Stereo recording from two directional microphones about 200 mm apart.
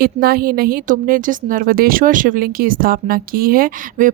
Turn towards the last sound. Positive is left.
turn(degrees=-45)  # may be behind; listen again after turning